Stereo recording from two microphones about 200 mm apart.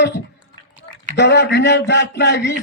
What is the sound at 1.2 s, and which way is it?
Speech, 60° left (ahead or behind).